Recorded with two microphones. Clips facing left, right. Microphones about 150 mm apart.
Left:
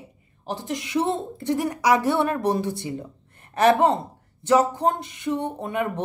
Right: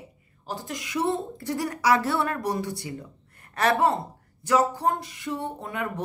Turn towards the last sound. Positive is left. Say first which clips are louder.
# left 5 dB
turn(degrees=20)  # may be behind; listen again after turning